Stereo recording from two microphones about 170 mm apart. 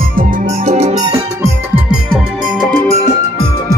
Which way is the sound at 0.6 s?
40° right (ahead or behind).